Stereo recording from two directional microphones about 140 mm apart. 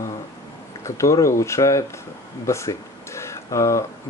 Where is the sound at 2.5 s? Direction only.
20° left (ahead or behind).